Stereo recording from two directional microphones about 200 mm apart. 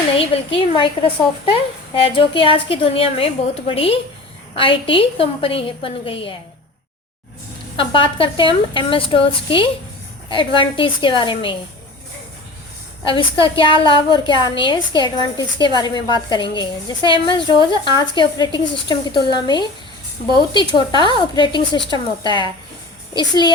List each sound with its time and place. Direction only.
0.2 s a woman's voice: 25° left (ahead or behind)
7.8 s a woman's voice: 25° left (ahead or behind)
13.4 s a woman's voice: 25° left (ahead or behind)